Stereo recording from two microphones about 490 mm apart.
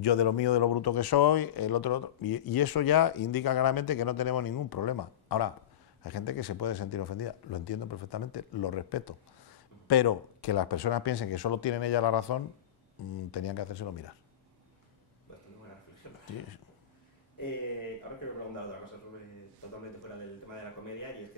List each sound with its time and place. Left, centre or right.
0.0 s speech: left